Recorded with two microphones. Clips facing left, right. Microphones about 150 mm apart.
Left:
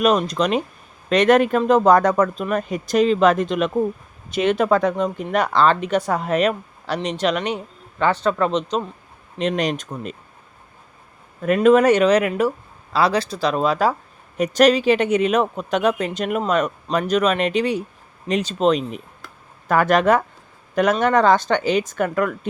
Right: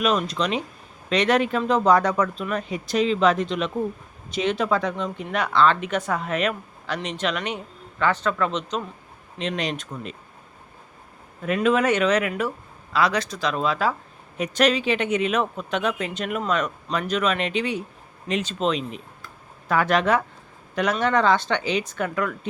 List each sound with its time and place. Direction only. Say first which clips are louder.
0.0 s speech: left 5 dB; 40° left (ahead or behind)
11.4 s speech: left 7 dB; 50° left (ahead or behind)